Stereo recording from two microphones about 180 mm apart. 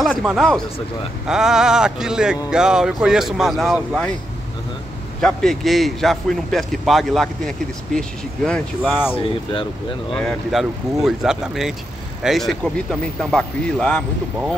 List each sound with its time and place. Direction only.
0.0 s speech: centre (ahead or behind)
5.2 s speech: centre (ahead or behind)
9.1 s speech: 30° left (ahead or behind)
10.1 s speech: centre (ahead or behind)